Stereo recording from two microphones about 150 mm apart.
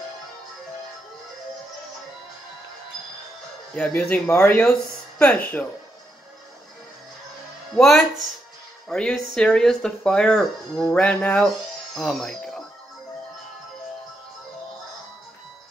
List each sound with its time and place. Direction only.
3.7 s speech: 10° left (ahead or behind)
7.7 s speech: centre (ahead or behind)